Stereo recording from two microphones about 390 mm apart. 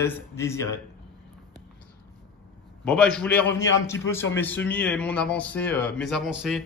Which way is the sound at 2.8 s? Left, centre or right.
Centre.